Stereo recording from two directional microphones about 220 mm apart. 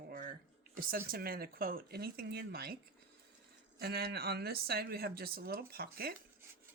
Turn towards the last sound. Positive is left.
turn(degrees=-45)  # may be behind; listen again after turning